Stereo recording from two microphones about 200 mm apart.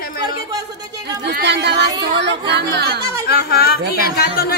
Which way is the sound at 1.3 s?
55° right (ahead or behind).